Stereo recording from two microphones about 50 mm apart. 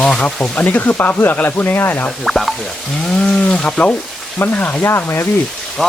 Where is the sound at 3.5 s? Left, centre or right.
Left.